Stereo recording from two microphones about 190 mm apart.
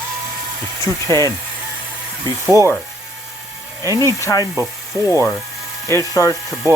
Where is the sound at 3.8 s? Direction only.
15° right (ahead or behind).